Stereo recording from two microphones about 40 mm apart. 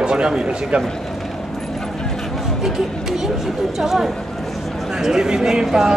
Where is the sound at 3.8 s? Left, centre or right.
Centre.